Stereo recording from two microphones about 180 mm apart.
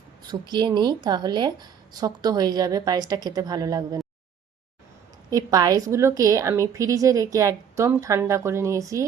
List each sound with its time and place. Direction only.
0.2 s a woman's voice: 25° right (ahead or behind)
5.3 s a woman's voice: 20° right (ahead or behind)